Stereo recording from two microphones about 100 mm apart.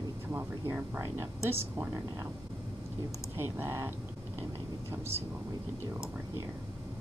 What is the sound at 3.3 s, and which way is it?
Speech, 25° right (ahead or behind).